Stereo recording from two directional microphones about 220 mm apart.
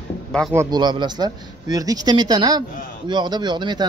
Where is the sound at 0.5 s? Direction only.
20° right (ahead or behind).